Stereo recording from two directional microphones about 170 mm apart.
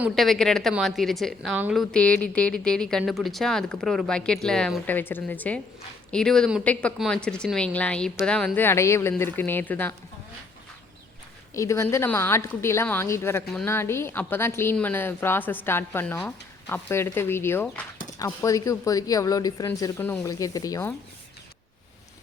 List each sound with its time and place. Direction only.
0.0 s a woman's voice: centre (ahead or behind)
11.5 s a woman's voice: 15° left (ahead or behind)